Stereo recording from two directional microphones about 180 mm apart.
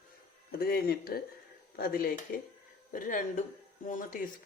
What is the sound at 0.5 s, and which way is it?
A woman's voice, 60° left (ahead or behind).